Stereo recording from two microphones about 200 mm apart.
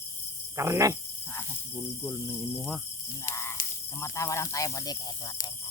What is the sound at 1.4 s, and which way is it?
Cricket, 10° left (ahead or behind).